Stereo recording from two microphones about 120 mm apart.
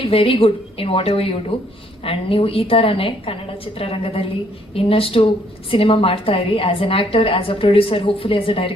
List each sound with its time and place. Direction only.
0.0 s a woman's voice: 50° left (ahead or behind)